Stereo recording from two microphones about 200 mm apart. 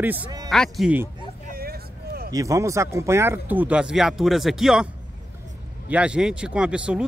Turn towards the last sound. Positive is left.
turn(degrees=-5)  # may be behind; listen again after turning